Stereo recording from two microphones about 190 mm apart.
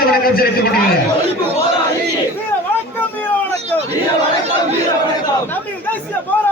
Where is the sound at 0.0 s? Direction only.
55° left (ahead or behind).